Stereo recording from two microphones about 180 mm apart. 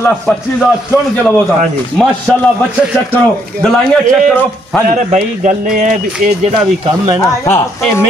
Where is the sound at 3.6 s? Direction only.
5° left (ahead or behind).